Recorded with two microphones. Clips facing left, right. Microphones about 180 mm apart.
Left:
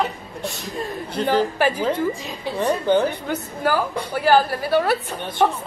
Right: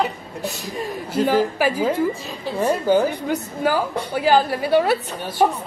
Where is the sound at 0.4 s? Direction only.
5° right (ahead or behind); by 4.9 s 20° right (ahead or behind).